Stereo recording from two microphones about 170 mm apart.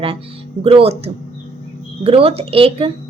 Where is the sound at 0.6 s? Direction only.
35° right (ahead or behind).